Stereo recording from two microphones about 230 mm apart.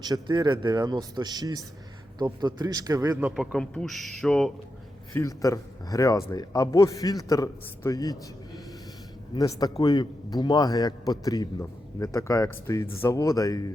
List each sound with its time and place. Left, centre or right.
0.0 s a man's voice: centre
5.1 s a man's voice: centre
9.3 s a man's voice: centre